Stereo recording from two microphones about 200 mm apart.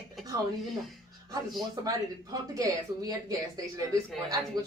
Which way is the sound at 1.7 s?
20° right (ahead or behind).